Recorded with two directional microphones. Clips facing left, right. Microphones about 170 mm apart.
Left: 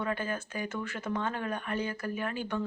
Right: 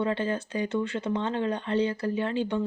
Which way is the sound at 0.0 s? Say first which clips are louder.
Right 6 dB; 25° right (ahead or behind).